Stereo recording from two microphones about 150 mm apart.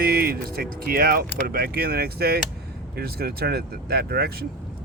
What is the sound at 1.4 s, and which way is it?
Speech, 90° right.